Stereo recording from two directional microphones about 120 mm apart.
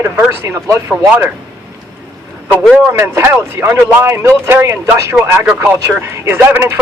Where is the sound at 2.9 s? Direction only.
20° right (ahead or behind).